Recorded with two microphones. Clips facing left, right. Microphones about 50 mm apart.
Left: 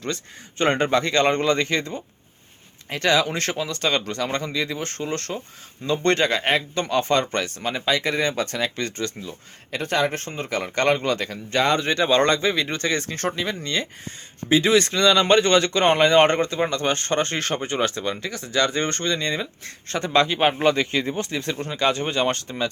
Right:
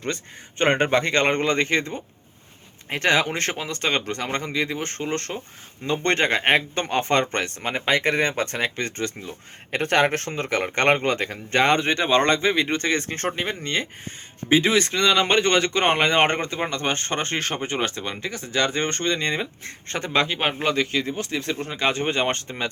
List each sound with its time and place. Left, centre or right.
0.6 s speech: right
9.7 s speech: right
10.7 s speech: right
14.5 s speech: centre
21.2 s speech: centre; by 22.7 s right